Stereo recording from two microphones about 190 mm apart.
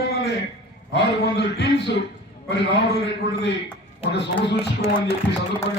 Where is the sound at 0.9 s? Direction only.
65° left (ahead or behind).